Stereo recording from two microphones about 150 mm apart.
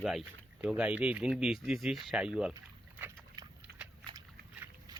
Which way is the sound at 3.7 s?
90° right.